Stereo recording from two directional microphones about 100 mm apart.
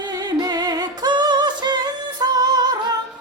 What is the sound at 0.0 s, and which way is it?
Music, 45° right (ahead or behind).